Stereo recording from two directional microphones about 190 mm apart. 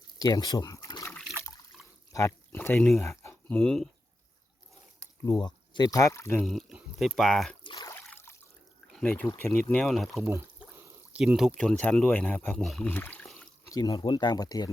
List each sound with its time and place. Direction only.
0.2 s a sound: 20° left (ahead or behind)
2.1 s speech: 15° left (ahead or behind)
3.0 s speech: 15° left (ahead or behind)
4.9 s speech: 15° left (ahead or behind)
6.4 s speech: centre (ahead or behind)
7.6 s a sound: 20° left (ahead or behind)
8.0 s trickle: 10° left (ahead or behind)
9.0 s speech: 5° left (ahead or behind)
10.2 s pour: 15° right (ahead or behind)
11.1 s speech: 5° right (ahead or behind)
13.7 s speech: 20° left (ahead or behind)